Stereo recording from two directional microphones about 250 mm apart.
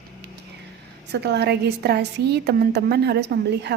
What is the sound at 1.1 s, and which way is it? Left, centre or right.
A woman's voice, right.